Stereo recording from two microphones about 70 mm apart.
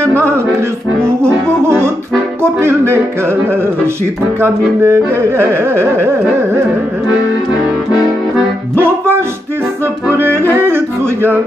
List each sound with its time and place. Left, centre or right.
0.0 s music: right
1.6 s speech: right
8.7 s music: right
10.0 s speech: right
10.5 s yodeling: right